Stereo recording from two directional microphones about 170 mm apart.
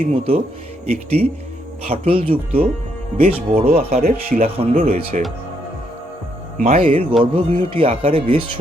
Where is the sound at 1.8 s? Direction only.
35° right (ahead or behind).